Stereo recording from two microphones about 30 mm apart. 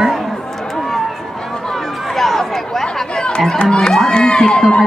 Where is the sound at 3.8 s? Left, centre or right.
Centre.